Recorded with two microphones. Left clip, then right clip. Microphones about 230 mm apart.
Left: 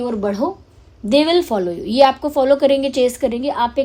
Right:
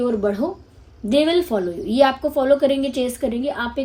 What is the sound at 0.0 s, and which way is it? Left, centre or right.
A woman's voice, left.